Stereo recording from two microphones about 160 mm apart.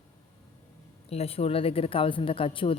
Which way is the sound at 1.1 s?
40° left (ahead or behind).